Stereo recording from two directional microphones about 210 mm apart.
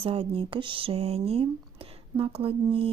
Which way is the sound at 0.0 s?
25° right (ahead or behind).